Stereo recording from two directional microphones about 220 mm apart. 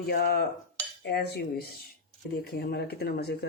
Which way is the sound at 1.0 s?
50° left (ahead or behind).